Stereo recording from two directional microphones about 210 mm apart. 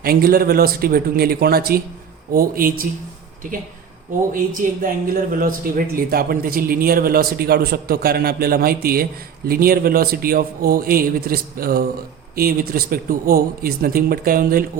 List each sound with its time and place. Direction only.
0.0 s speech: 45° right (ahead or behind)
4.6 s speech: 40° right (ahead or behind)